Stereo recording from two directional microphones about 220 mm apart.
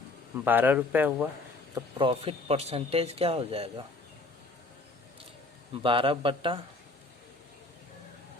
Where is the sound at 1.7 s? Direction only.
25° right (ahead or behind).